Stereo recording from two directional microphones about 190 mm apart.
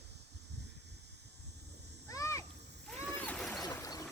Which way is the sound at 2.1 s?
15° left (ahead or behind).